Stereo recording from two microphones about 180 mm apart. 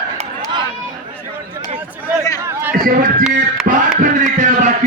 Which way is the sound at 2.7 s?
50° right (ahead or behind).